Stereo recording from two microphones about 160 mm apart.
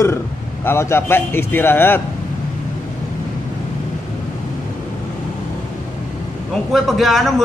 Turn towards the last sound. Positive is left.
turn(degrees=0)  # may be behind; listen again after turning